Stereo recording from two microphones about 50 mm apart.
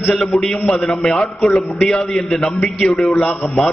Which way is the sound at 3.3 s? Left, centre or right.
Left.